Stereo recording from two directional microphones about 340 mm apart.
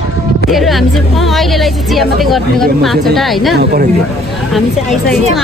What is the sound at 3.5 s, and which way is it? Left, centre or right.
Speech, right.